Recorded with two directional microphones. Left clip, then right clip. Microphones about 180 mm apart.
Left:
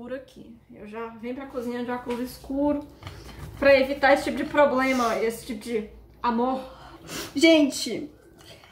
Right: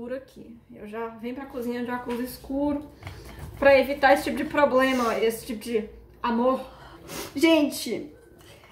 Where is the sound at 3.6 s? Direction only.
5° right (ahead or behind).